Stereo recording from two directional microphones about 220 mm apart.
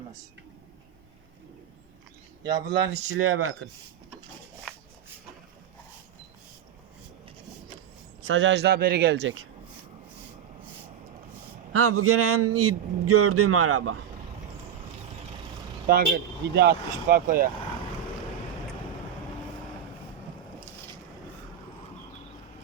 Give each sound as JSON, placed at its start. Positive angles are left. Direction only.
{"t": 2.5, "sound": "speech", "side_deg": -20}
{"t": 3.1, "sound": "speech", "side_deg": -70}
{"t": 8.3, "sound": "speech", "side_deg": -55}
{"t": 11.7, "sound": "a man's voice", "side_deg": -80}
{"t": 15.9, "sound": "speech", "side_deg": -40}